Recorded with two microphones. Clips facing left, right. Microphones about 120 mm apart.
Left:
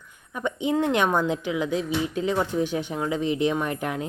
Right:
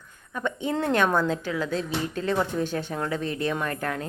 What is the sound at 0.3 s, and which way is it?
Speech, 15° left (ahead or behind).